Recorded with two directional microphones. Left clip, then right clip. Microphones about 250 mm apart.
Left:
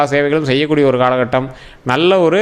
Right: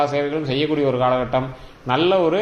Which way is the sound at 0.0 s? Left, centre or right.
Left.